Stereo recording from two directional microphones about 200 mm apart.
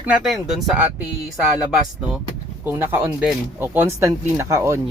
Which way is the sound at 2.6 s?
10° right (ahead or behind).